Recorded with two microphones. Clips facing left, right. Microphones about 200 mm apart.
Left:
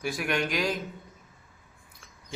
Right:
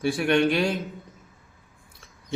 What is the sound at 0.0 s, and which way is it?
Speech, 30° right (ahead or behind).